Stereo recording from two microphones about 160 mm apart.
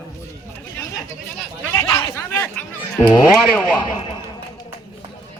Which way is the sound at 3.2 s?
10° right (ahead or behind).